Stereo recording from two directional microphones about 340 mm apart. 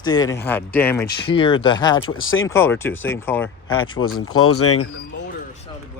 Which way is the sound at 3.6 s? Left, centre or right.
Left.